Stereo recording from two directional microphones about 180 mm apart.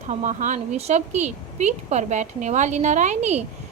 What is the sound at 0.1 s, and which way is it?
A woman's voice, 45° right (ahead or behind).